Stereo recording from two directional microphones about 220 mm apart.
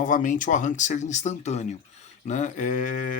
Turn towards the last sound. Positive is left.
turn(degrees=40)  # may be behind; listen again after turning